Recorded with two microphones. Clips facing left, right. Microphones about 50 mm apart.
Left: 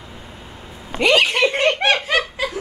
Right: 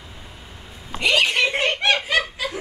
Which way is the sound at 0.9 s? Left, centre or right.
Left.